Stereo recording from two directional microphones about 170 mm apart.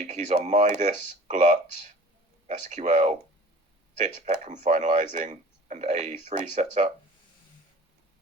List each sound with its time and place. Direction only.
0.1 s speech: 45° right (ahead or behind)